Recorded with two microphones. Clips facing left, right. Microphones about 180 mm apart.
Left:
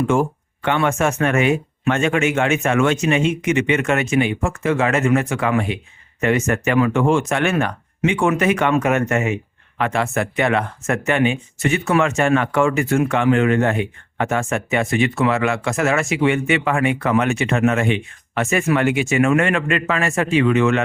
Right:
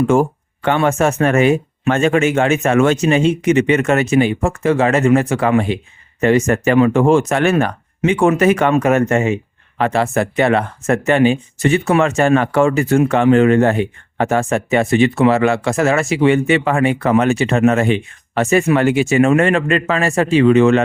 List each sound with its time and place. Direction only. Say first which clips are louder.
0.1 s speech: right 4 dB; 40° right (ahead or behind)